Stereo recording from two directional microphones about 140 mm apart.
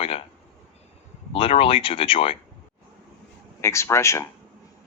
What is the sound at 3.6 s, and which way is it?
Speech, 20° left (ahead or behind).